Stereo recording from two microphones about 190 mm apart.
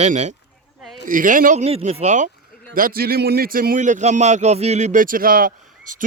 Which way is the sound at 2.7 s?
50° right (ahead or behind).